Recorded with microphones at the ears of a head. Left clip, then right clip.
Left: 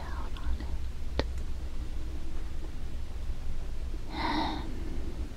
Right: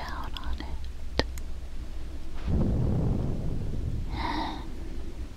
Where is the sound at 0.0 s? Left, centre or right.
Right.